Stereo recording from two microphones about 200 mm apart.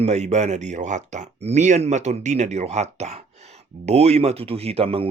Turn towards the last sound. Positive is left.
turn(degrees=-30)  # may be behind; listen again after turning